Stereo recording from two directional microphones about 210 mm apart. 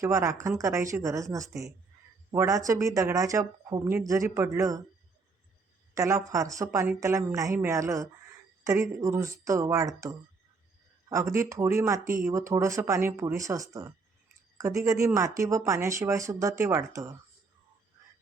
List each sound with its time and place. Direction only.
0.0 s speech: 15° right (ahead or behind)
5.9 s speech: 15° right (ahead or behind)